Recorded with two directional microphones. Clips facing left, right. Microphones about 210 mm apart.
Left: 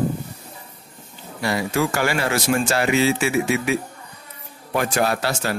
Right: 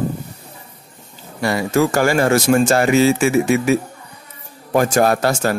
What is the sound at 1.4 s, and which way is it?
Speech, 50° right (ahead or behind).